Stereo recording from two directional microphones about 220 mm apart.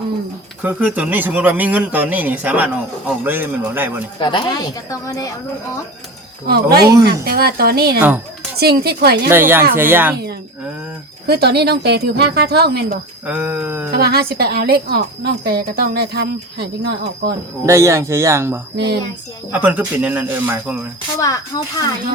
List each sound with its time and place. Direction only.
0.6 s speech: 10° right (ahead or behind)
4.2 s a woman's voice: 20° left (ahead or behind)
6.5 s speech: 45° right (ahead or behind)
9.3 s speech: 10° right (ahead or behind)
11.3 s speech: 45° right (ahead or behind)
13.2 s speech: 5° right (ahead or behind)
13.9 s speech: 45° right (ahead or behind)
17.7 s speech: 15° right (ahead or behind)
21.2 s a woman's voice: 15° left (ahead or behind)